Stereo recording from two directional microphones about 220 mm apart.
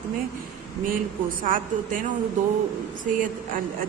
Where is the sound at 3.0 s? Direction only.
35° right (ahead or behind).